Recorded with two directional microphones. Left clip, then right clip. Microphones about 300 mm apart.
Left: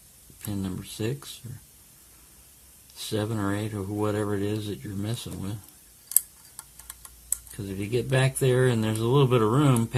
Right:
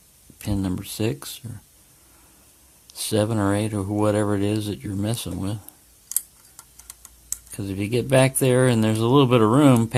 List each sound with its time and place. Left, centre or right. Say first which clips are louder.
0.4 s speech: right 7 dB; right
2.8 s speech: right 7 dB; right
7.5 s speech: right 4 dB; right